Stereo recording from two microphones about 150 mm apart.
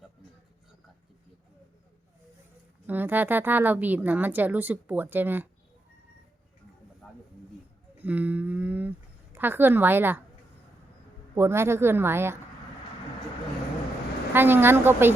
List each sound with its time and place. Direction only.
2.8 s a woman's voice: 10° right (ahead or behind)
8.0 s a woman's voice: 10° right (ahead or behind)
11.3 s a woman's voice: 15° right (ahead or behind)
14.3 s a woman's voice: 15° right (ahead or behind)